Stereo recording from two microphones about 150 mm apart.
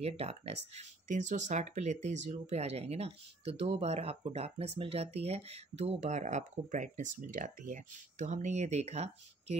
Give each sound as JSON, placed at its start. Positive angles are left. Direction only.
{"t": 0.0, "sound": "speech", "side_deg": -45}